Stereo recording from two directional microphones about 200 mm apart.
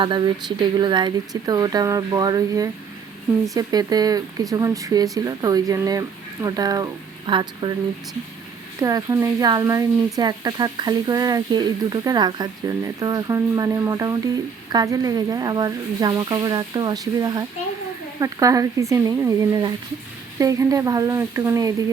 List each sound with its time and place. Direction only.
0.0 s speech: 25° right (ahead or behind)
8.8 s speech: 20° right (ahead or behind)